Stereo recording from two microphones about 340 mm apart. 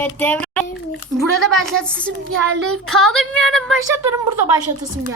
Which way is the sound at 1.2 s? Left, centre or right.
Centre.